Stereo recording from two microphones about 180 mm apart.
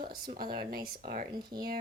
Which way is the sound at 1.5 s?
25° right (ahead or behind).